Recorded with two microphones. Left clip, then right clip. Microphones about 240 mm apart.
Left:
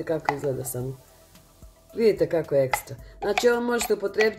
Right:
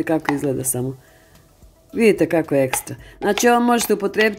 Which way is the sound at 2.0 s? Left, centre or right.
Right.